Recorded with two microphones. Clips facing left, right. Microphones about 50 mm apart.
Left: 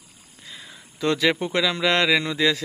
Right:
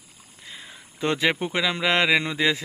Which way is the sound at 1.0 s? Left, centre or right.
Right.